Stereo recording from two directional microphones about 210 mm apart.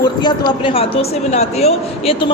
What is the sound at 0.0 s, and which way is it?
A man's voice, 20° left (ahead or behind).